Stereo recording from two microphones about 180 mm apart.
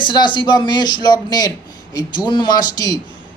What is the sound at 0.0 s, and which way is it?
Speech, 25° left (ahead or behind).